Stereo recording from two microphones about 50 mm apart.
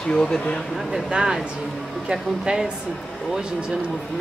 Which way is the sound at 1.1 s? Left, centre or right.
Centre.